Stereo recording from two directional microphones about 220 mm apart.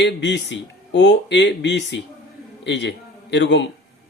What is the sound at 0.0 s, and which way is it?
A man's voice, 50° left (ahead or behind).